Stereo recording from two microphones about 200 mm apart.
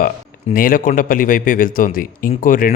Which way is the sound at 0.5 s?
45° left (ahead or behind).